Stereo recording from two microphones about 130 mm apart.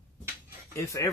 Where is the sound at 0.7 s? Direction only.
20° left (ahead or behind).